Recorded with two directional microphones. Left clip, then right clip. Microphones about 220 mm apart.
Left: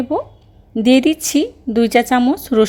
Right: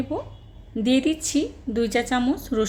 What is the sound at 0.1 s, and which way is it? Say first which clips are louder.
A woman's voice: left 10 dB; 30° left (ahead or behind).